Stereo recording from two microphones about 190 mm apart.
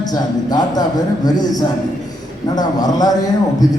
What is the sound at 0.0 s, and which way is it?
A man's voice, 20° left (ahead or behind).